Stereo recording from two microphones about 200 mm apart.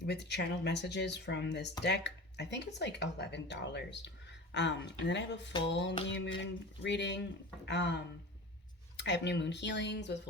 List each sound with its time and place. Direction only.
0.0 s speech: 55° left (ahead or behind)
9.0 s speech: 60° left (ahead or behind)